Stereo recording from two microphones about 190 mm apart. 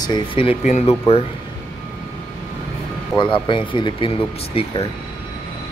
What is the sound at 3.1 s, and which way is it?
Speech, 25° left (ahead or behind).